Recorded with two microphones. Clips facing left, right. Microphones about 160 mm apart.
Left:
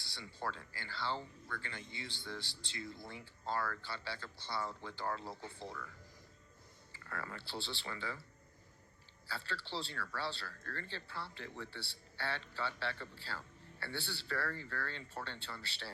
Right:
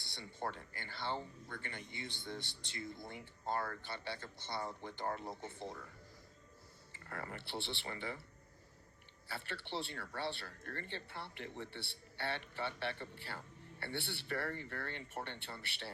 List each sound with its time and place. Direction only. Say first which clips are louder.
0.0 s a sound: even; 20° right (ahead or behind)
0.3 s speech: even; 25° right (ahead or behind)
6.9 s speech: even; 25° right (ahead or behind)
9.2 s speech: left 1 dB; 20° right (ahead or behind)